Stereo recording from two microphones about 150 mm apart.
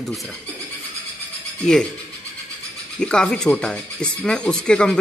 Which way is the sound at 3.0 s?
5° left (ahead or behind).